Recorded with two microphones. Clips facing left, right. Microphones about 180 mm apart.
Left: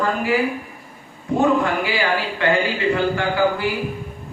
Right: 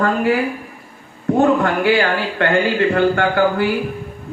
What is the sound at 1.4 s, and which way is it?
Speech, 60° right (ahead or behind).